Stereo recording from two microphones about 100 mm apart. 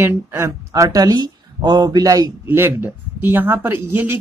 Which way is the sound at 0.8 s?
40° right (ahead or behind).